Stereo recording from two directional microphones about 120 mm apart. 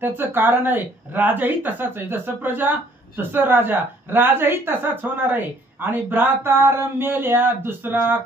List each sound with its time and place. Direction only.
0.0 s a woman's voice: 15° right (ahead or behind)